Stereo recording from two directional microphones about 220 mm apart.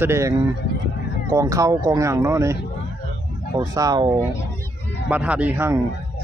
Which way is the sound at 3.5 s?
15° right (ahead or behind).